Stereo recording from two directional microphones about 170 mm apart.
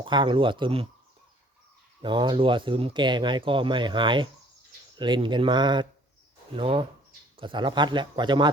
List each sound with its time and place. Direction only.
0.0 s speech: 30° right (ahead or behind)
2.0 s speech: 30° right (ahead or behind)